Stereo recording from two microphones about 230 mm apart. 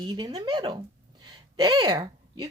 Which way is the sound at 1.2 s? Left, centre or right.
Centre.